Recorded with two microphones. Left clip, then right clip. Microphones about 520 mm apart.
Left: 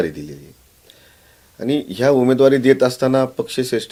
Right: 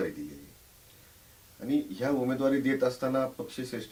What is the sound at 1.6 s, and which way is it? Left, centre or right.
Speech, left.